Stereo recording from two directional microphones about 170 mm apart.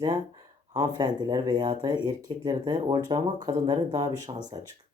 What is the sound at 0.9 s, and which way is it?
Speech, 25° right (ahead or behind).